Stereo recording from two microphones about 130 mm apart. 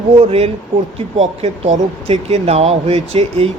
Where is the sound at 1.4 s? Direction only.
55° right (ahead or behind).